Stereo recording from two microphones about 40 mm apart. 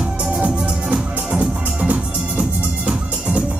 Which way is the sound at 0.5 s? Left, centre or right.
Centre.